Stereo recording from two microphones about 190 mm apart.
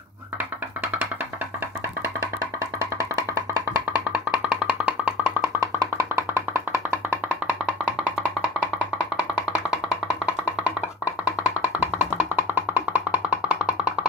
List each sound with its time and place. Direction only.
5.6 s music: 15° right (ahead or behind)
11.1 s music: 15° left (ahead or behind)
11.6 s music: 10° right (ahead or behind)